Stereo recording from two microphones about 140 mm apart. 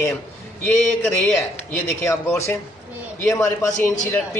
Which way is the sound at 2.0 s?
15° left (ahead or behind).